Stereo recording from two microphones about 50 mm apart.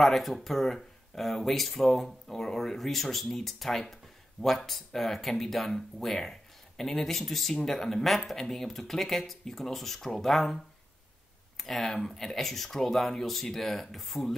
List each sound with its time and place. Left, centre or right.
0.0 s speech: centre